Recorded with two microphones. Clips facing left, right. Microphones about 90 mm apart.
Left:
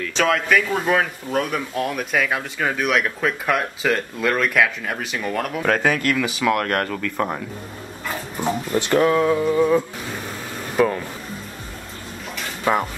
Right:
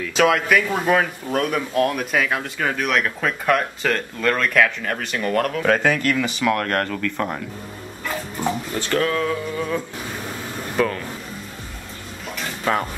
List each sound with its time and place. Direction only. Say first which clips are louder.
0.0 s speech: right 2 dB; 5° right (ahead or behind)
8.7 s speech: left 6 dB; 20° left (ahead or behind)